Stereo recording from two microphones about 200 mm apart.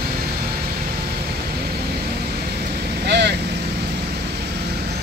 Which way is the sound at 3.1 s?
55° right (ahead or behind).